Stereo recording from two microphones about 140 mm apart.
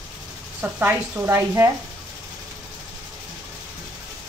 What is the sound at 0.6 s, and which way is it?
Speech, 15° right (ahead or behind).